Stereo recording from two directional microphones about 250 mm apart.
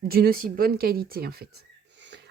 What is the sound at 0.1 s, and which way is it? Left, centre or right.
Speech, right.